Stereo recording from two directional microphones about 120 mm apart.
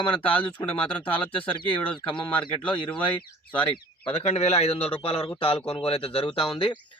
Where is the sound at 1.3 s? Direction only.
45° left (ahead or behind).